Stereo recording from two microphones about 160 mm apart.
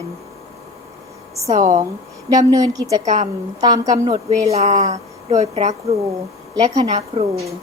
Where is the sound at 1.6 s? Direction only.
50° right (ahead or behind).